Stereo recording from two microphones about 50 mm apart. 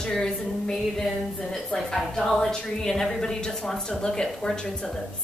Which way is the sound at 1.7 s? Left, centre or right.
Centre.